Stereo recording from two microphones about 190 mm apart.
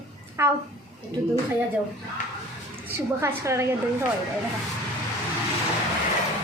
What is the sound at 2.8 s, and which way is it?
Speech, 15° right (ahead or behind).